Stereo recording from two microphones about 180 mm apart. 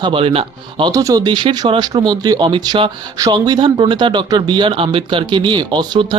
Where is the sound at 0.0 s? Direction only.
30° right (ahead or behind).